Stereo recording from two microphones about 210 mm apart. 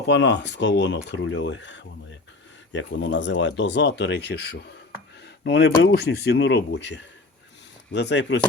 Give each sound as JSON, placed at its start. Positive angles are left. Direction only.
{"t": 0.1, "sound": "speech", "side_deg": 55}